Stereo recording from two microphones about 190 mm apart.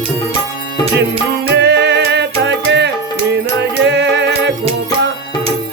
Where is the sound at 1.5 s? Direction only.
65° right (ahead or behind).